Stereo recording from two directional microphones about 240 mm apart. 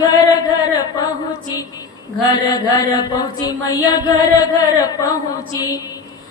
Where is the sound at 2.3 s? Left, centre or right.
Centre.